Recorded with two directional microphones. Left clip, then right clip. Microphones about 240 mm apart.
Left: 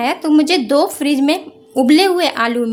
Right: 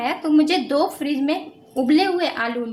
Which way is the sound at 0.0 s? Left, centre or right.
Left.